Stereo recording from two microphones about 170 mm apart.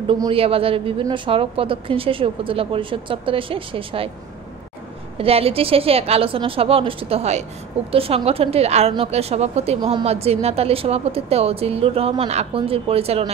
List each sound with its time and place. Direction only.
0.0 s a woman's voice: 30° right (ahead or behind)
5.1 s a woman's voice: 35° right (ahead or behind)
9.8 s speech: 25° right (ahead or behind)
10.0 s a woman's voice: 35° right (ahead or behind)